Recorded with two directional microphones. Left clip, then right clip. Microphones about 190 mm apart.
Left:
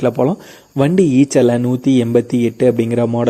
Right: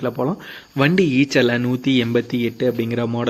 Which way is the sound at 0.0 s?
30° left (ahead or behind).